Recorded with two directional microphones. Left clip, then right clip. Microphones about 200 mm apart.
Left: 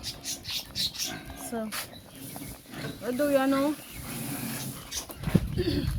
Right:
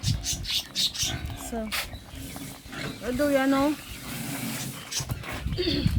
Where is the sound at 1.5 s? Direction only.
10° right (ahead or behind).